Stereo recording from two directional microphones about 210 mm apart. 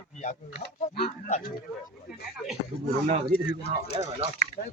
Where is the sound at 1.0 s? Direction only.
30° left (ahead or behind).